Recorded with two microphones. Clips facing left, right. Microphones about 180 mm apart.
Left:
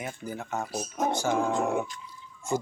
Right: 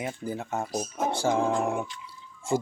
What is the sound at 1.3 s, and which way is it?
Dog, 30° right (ahead or behind).